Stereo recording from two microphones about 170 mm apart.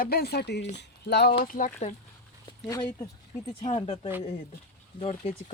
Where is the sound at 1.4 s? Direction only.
50° left (ahead or behind).